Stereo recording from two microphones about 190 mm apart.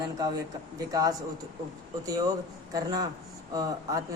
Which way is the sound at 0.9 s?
20° right (ahead or behind).